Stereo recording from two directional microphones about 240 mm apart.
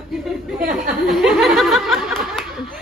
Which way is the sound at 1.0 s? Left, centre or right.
Centre.